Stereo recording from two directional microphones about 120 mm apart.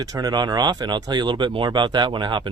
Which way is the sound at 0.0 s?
30° right (ahead or behind).